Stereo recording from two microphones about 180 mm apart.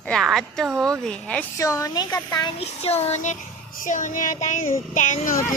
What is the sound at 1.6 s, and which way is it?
Speech, 20° left (ahead or behind).